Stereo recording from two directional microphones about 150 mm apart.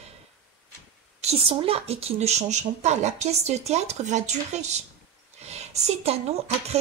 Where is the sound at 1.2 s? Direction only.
40° right (ahead or behind).